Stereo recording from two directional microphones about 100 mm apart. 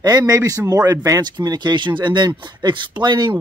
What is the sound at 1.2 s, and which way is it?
Speech, 45° right (ahead or behind).